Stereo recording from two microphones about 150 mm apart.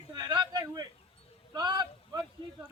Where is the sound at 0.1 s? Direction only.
30° right (ahead or behind).